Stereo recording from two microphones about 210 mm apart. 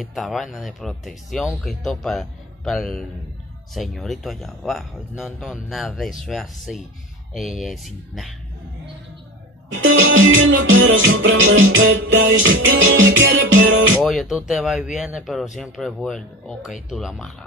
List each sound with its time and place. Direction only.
0.0 s speech: centre (ahead or behind)
9.7 s music: 65° right (ahead or behind)
13.9 s speech: centre (ahead or behind)